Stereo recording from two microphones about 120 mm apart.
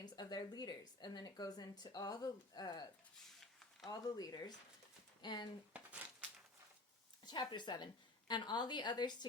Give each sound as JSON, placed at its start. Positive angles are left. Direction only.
{"t": 0.0, "sound": "a woman's voice", "side_deg": 35}
{"t": 5.7, "sound": "a sound", "side_deg": -10}
{"t": 7.3, "sound": "speech", "side_deg": 40}